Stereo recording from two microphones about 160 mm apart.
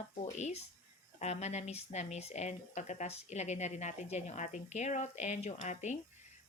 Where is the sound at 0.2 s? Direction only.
45° left (ahead or behind).